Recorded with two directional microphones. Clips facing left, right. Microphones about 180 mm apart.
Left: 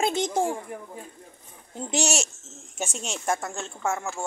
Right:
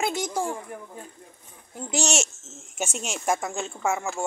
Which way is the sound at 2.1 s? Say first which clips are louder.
Right 1 dB; 5° right (ahead or behind).